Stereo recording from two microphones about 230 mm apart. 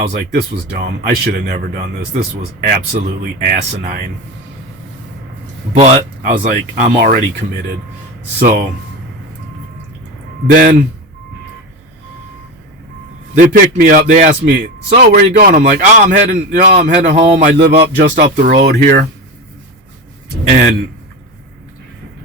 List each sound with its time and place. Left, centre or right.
0.1 s a man's voice: right
5.8 s a man's voice: right
8.4 s a man's voice: right
10.5 s a man's voice: right
13.3 s a man's voice: right
20.5 s a man's voice: right